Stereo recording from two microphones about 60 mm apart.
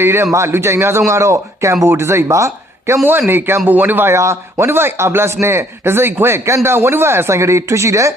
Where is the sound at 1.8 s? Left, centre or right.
Right.